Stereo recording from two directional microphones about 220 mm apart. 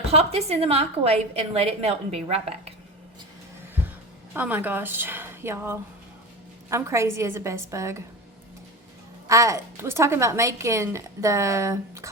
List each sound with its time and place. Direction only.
0.1 s a woman's voice: 30° right (ahead or behind)
4.4 s a woman's voice: 5° right (ahead or behind)
9.2 s a woman's voice: 15° right (ahead or behind)